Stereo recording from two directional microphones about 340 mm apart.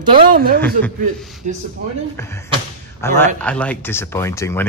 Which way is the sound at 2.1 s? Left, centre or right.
Centre.